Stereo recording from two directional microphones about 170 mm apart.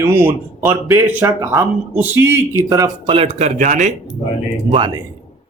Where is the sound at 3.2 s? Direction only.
40° right (ahead or behind).